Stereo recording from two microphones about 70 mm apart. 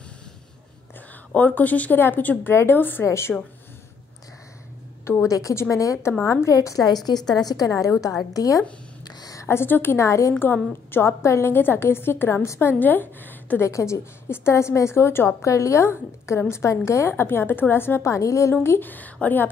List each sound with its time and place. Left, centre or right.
1.3 s a woman's voice: left
5.2 s a woman's voice: left
9.0 s a sound: left
9.4 s a woman's voice: left
10.0 s a woman's voice: left
10.4 s a woman's voice: left
13.7 s a woman's voice: left
18.5 s speech: left